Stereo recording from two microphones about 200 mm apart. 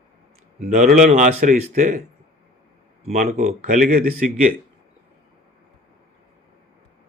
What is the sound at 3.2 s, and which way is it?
Speech, 35° right (ahead or behind).